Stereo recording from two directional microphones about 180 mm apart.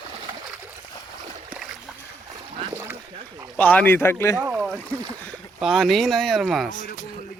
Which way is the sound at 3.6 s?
10° left (ahead or behind).